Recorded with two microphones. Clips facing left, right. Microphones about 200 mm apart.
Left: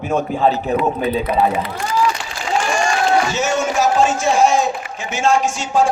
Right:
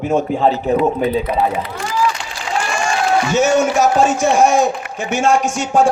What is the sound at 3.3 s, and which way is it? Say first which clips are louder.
A man's voice: right 5 dB; 55° right (ahead or behind).